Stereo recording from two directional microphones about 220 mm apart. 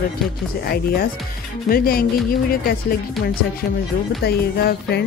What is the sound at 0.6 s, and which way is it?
Speech, 45° left (ahead or behind).